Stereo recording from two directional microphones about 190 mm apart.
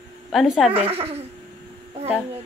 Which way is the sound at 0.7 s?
30° right (ahead or behind).